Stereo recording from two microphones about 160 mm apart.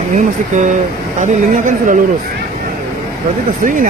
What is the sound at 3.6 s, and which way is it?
Speech, 55° right (ahead or behind).